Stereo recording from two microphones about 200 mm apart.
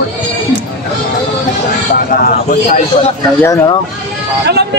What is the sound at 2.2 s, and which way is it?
Speech, 45° left (ahead or behind).